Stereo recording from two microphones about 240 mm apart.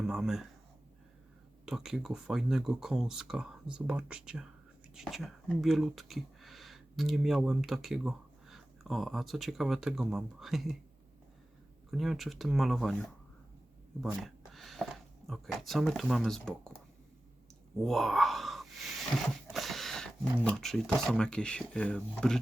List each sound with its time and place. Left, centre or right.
0.0 s speech: centre
1.6 s speech: centre
11.9 s speech: centre
14.0 s speech: centre
17.8 s speech: centre